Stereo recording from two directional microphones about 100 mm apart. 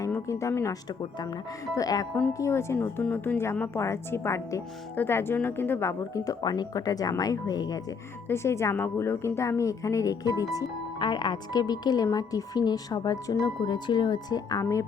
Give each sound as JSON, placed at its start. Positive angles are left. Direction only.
{"t": 0.1, "sound": "speech", "side_deg": 30}
{"t": 0.9, "sound": "speech", "side_deg": 45}
{"t": 2.4, "sound": "speech", "side_deg": 25}
{"t": 8.3, "sound": "speech", "side_deg": 25}
{"t": 11.0, "sound": "speech", "side_deg": 50}